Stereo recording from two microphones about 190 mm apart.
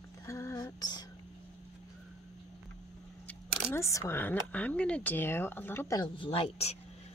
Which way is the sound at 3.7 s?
15° left (ahead or behind).